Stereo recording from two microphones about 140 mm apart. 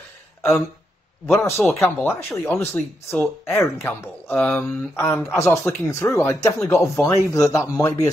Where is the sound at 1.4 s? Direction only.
20° left (ahead or behind).